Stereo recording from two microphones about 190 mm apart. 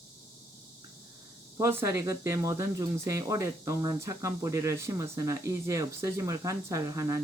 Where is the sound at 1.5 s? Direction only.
15° right (ahead or behind).